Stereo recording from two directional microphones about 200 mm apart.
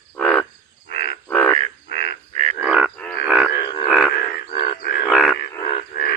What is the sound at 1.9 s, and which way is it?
Frog, 55° left (ahead or behind).